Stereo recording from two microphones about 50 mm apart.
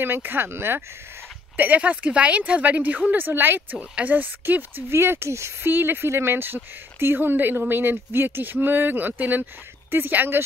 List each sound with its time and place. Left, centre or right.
0.0 s speech: right
1.6 s a woman's voice: right
3.7 s speech: right
4.9 s speech: right
5.7 s speech: right